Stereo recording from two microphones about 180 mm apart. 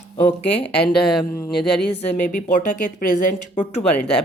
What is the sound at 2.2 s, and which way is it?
Speech, 45° left (ahead or behind).